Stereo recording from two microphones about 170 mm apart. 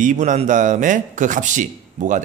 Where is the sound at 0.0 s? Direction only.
45° right (ahead or behind).